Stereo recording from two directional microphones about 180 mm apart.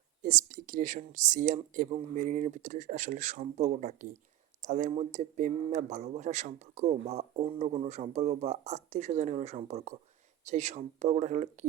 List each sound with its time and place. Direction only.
0.2 s speech: 45° right (ahead or behind)